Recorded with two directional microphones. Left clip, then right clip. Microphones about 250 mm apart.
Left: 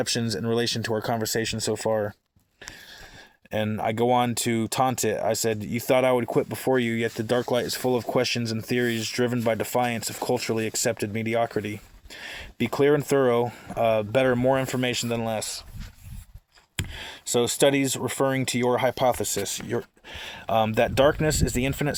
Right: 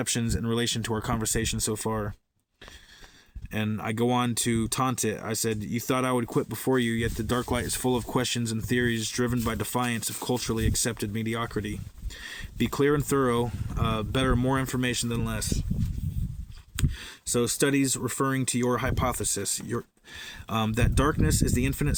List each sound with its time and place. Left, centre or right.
0.1 s speech: centre
3.5 s speech: centre
16.7 s speech: centre